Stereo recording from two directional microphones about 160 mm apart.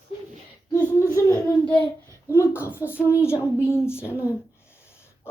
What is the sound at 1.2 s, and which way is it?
A child's voice, 15° left (ahead or behind).